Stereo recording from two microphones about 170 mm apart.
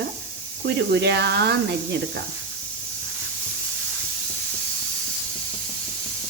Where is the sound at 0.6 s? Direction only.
80° right.